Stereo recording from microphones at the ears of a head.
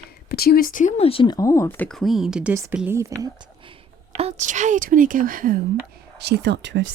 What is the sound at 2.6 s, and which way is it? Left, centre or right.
Speech, right.